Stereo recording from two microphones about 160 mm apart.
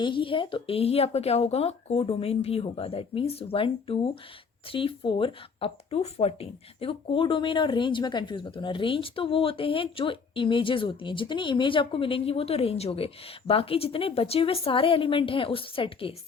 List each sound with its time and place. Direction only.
0.0 s speech: 30° left (ahead or behind)